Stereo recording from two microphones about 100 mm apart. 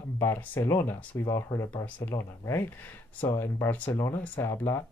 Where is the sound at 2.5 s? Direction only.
20° left (ahead or behind).